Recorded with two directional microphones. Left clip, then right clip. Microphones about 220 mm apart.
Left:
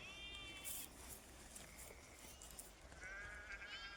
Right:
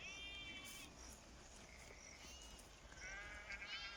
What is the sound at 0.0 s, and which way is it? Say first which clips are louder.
Sheep: right 1 dB; 5° left (ahead or behind).